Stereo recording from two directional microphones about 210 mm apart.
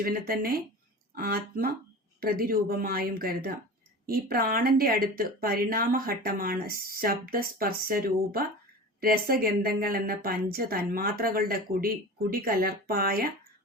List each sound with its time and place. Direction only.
0.0 s speech: 45° right (ahead or behind)